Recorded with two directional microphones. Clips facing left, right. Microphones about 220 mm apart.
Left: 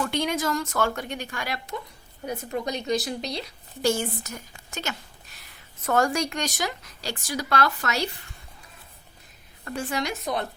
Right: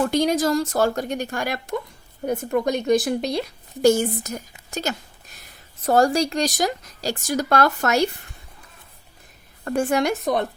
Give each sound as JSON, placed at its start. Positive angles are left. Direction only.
{"t": 0.0, "sound": "a woman's voice", "side_deg": -40}
{"t": 9.6, "sound": "a woman's voice", "side_deg": -50}